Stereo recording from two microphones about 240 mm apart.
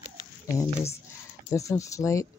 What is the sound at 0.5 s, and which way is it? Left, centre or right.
Speech, centre.